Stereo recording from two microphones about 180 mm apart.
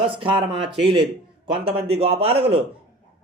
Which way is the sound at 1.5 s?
30° right (ahead or behind).